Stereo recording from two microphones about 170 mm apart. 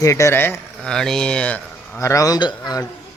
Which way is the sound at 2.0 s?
20° left (ahead or behind).